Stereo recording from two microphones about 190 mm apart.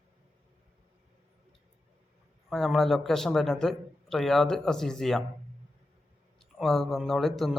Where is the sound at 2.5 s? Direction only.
Centre (ahead or behind).